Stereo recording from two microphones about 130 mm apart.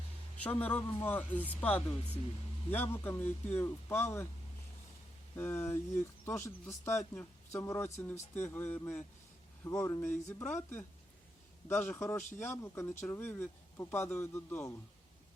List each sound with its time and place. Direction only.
0.4 s speech: 10° left (ahead or behind)
5.4 s speech: 20° left (ahead or behind)
11.9 s speech: 20° left (ahead or behind)